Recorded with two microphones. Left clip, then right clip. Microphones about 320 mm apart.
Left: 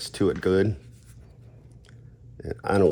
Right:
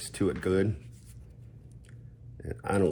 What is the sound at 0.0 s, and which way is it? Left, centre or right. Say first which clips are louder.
Speech: left 6 dB; left.